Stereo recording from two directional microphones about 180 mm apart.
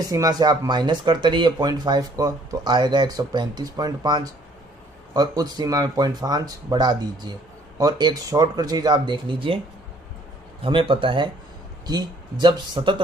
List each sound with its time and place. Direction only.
0.0 s speech: 20° right (ahead or behind)
10.6 s speech: 30° right (ahead or behind)